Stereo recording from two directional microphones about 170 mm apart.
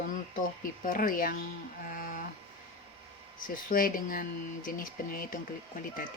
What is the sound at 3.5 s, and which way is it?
Speech, 55° left (ahead or behind).